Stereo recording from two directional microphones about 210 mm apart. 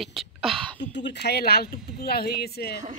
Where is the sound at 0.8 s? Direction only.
55° left (ahead or behind).